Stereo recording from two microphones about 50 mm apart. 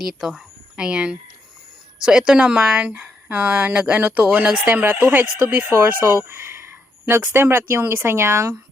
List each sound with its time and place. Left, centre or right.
0.0 s speech: centre
0.8 s speech: centre
3.0 s speech: right
3.9 s speech: right
4.4 s speech: right
4.7 s speech: right
5.7 s speech: right
6.2 s a sound: right
7.4 s speech: right